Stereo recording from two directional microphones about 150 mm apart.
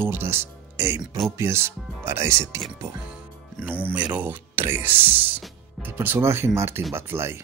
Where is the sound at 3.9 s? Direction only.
10° right (ahead or behind).